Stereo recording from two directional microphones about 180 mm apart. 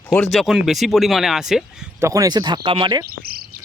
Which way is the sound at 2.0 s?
20° right (ahead or behind).